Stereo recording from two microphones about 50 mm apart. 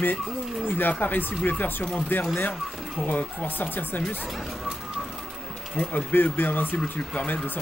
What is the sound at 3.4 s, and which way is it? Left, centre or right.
Speech, left.